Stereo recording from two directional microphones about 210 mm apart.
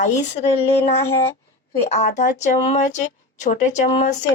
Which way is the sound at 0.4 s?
30° left (ahead or behind).